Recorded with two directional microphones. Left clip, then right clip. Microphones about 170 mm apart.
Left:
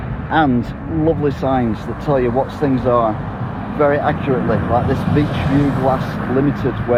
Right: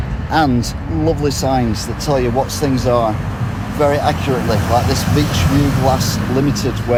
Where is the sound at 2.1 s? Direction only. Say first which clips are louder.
Even; 10° left (ahead or behind).